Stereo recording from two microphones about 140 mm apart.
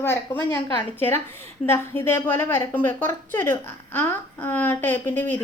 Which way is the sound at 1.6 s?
15° left (ahead or behind).